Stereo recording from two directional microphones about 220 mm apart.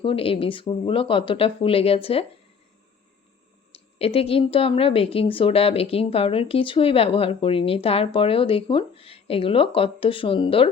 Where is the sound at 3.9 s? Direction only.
25° left (ahead or behind).